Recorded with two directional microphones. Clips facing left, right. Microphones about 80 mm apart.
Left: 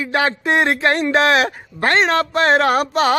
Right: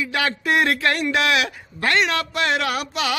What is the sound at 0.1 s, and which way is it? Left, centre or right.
A man's voice, left.